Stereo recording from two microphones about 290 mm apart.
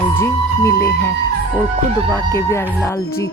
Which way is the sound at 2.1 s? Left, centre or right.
Centre.